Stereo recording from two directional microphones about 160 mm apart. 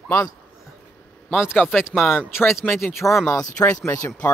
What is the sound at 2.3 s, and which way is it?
Speech, 15° left (ahead or behind).